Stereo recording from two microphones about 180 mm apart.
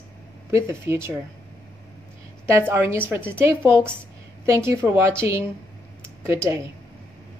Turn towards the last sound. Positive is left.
turn(degrees=-15)  # may be behind; listen again after turning